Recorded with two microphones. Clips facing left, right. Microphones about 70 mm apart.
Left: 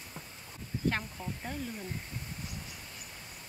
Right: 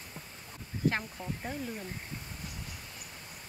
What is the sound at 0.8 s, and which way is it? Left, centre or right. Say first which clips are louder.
Speech: right 2 dB; centre.